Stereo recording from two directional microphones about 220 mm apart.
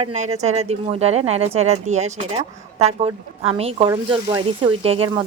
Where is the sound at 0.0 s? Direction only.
30° right (ahead or behind).